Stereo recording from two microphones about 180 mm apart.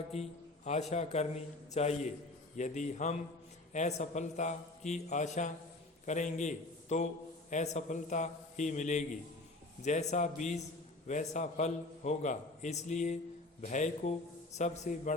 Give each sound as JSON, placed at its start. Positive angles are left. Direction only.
{"t": 0.1, "sound": "a man's voice", "side_deg": 40}